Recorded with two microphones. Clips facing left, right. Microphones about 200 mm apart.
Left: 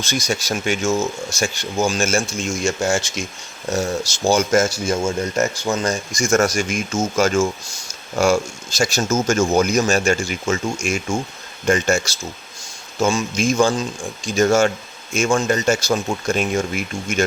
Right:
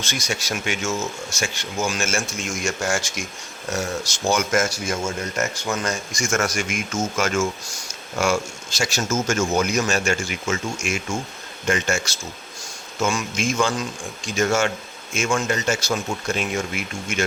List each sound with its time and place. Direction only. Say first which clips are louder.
0.0 s speech: left 5 dB; 35° left (ahead or behind)